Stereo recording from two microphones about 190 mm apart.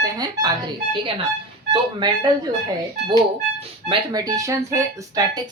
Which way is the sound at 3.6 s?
25° right (ahead or behind).